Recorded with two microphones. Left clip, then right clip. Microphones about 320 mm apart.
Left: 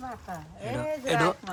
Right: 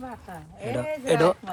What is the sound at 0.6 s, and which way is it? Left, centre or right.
Speech, centre.